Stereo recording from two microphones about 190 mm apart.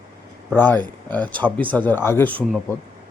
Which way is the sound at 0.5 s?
10° left (ahead or behind).